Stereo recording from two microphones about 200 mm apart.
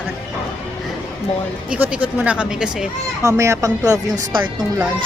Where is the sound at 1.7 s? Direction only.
5° right (ahead or behind).